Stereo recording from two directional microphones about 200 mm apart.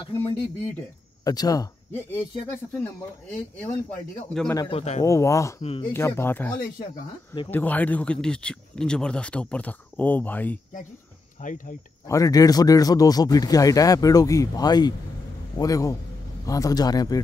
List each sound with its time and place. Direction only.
1.2 s speech: 20° left (ahead or behind); by 4.6 s 5° left (ahead or behind)
4.6 s a man's voice: 30° left (ahead or behind)
5.0 s speech: 15° left (ahead or behind)
5.6 s a man's voice: 30° left (ahead or behind)
5.9 s speech: 10° left (ahead or behind)
11.4 s speech: 40° left (ahead or behind)
12.1 s a man's voice: 15° left (ahead or behind)